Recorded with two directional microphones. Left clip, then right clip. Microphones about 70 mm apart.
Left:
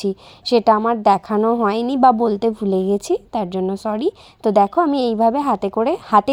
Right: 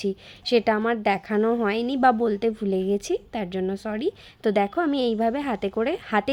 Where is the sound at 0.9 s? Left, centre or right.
Left.